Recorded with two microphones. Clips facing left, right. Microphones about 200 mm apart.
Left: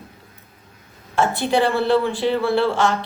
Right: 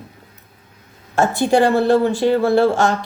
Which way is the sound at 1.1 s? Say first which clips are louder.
Right 4 dB; 45° right (ahead or behind).